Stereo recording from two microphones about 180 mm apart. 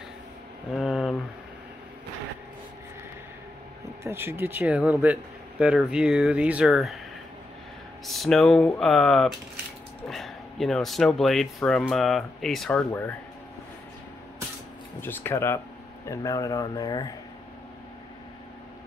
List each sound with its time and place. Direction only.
0.7 s a sound: centre (ahead or behind)
4.0 s speech: 15° right (ahead or behind)
8.1 s speech: centre (ahead or behind)
15.0 s speech: 10° left (ahead or behind)